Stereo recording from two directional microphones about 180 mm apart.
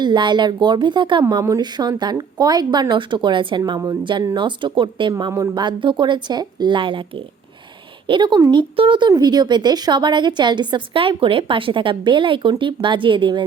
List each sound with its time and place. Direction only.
0.0 s speech: 25° right (ahead or behind)
5.1 s speech: 15° right (ahead or behind)
8.0 s speech: 25° right (ahead or behind)